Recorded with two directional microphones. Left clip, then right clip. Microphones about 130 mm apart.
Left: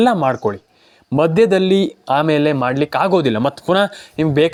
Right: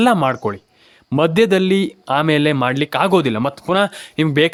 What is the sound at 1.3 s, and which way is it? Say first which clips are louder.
Speech: left 2 dB; 20° right (ahead or behind).